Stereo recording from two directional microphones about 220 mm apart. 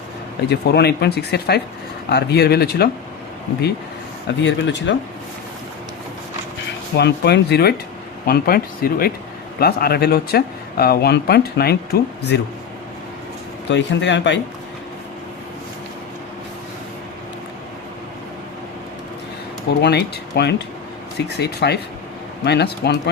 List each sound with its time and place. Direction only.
0.4 s speech: 50° left (ahead or behind)
4.4 s speech: 55° left (ahead or behind)
6.9 s speech: 50° left (ahead or behind)
13.7 s speech: 55° left (ahead or behind)
19.8 s speech: 50° left (ahead or behind)